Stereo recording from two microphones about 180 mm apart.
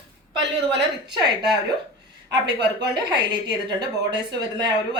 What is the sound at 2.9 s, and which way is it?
A woman's voice, 25° right (ahead or behind).